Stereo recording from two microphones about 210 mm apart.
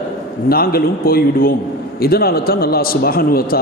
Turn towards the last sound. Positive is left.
turn(degrees=45)  # may be behind; listen again after turning